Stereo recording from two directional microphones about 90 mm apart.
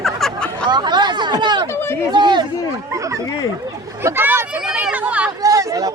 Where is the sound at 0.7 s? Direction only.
55° right (ahead or behind).